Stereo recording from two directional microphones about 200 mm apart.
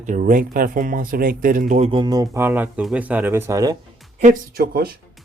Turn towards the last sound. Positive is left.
turn(degrees=-50)  # may be behind; listen again after turning